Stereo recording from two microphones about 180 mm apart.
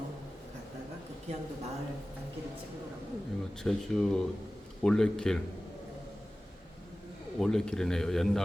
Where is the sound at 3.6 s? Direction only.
5° left (ahead or behind).